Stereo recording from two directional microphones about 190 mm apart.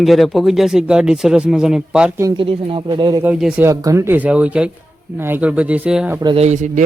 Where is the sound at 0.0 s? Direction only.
Centre (ahead or behind).